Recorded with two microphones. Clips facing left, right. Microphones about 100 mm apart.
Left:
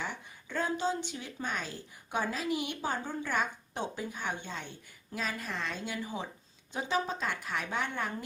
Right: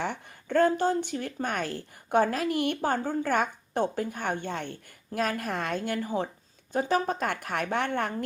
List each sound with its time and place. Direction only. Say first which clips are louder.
0.0 s a woman's voice: right 7 dB; 55° right (ahead or behind)